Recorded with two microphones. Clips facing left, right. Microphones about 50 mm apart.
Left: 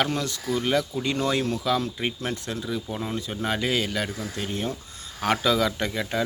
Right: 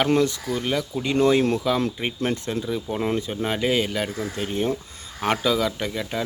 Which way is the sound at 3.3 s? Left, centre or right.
Centre.